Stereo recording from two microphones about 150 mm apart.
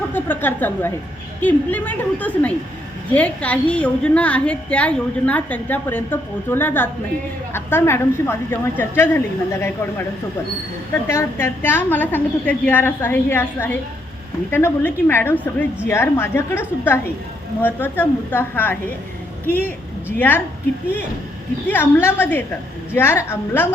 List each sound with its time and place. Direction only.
0.1 s a woman's voice: 15° left (ahead or behind)
11.1 s a woman's voice: 15° left (ahead or behind)
21.7 s a woman's voice: 15° left (ahead or behind)